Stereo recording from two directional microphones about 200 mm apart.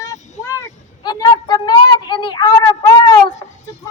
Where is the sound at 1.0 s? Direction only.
20° left (ahead or behind).